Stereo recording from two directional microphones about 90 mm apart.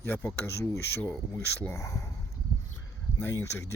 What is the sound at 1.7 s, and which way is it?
Speech, 35° left (ahead or behind).